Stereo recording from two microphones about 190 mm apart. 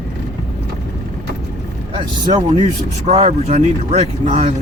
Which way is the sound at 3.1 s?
35° right (ahead or behind).